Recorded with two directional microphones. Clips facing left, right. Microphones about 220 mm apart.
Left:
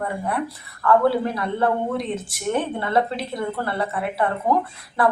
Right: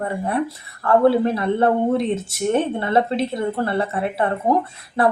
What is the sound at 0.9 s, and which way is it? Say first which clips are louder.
Speech: right 3 dB; 25° right (ahead or behind).